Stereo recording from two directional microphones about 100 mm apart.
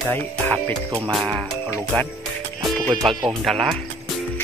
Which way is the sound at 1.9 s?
10° left (ahead or behind).